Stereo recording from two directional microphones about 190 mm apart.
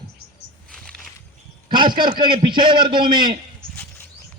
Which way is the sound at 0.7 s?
5° left (ahead or behind).